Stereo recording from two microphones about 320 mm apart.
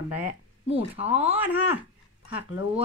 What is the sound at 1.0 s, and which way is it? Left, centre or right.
Speech, centre.